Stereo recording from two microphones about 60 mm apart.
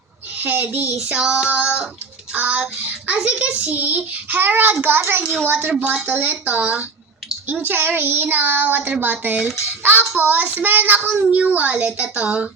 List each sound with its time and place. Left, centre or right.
0.3 s a child's voice: right
1.1 s a child's voice: centre; by 5.7 s right
5.8 s a child's voice: right